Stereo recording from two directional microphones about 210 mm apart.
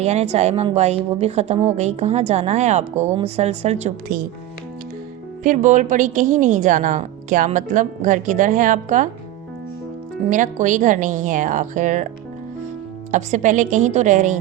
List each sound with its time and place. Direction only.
0.0 s a woman's voice: 30° right (ahead or behind)
5.4 s a woman's voice: 35° right (ahead or behind)
10.2 s a woman's voice: 35° right (ahead or behind)
13.1 s a woman's voice: 35° right (ahead or behind)